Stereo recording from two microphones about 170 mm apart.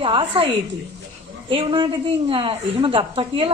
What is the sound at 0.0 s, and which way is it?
Speech, 30° right (ahead or behind).